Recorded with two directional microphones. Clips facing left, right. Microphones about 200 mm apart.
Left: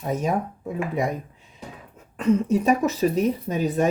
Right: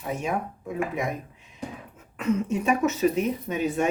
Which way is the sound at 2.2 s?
35° left (ahead or behind).